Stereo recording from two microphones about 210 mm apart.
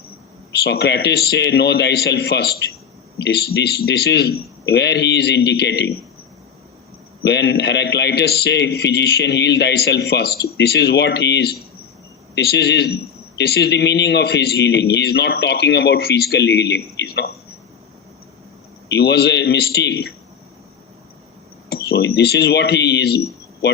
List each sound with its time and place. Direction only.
0.6 s a man's voice: 50° left (ahead or behind)
7.2 s a man's voice: 55° left (ahead or behind)
18.9 s a man's voice: 50° left (ahead or behind)
21.7 s speech: 50° left (ahead or behind)